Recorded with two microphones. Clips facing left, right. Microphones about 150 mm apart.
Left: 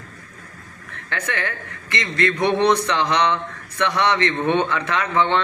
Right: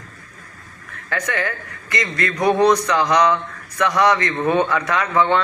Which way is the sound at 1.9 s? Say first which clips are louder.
Left 1 dB; 25° left (ahead or behind).